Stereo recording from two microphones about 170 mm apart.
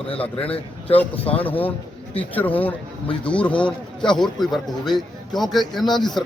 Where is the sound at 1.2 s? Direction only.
10° left (ahead or behind).